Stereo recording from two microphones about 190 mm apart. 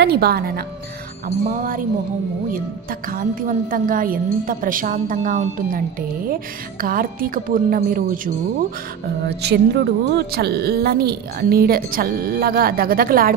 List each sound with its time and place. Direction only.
0.0 s a woman's voice: 55° right (ahead or behind)
9.2 s a woman's voice: 60° right (ahead or behind)